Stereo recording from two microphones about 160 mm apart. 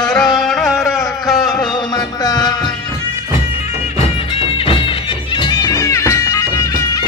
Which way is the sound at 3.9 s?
35° left (ahead or behind).